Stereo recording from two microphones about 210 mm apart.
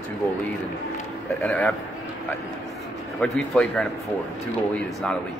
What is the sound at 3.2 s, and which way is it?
Speech, 5° left (ahead or behind).